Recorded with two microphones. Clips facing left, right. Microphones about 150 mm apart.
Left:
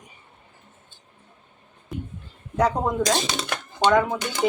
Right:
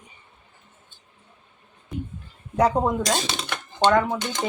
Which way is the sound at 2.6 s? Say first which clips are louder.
Right 1 dB; 10° right (ahead or behind).